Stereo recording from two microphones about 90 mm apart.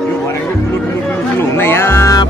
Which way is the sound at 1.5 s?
25° left (ahead or behind).